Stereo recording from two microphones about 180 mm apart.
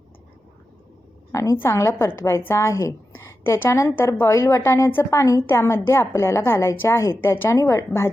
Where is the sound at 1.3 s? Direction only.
15° left (ahead or behind).